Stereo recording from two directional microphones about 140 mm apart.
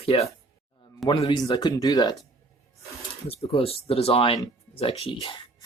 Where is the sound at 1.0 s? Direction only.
Centre (ahead or behind).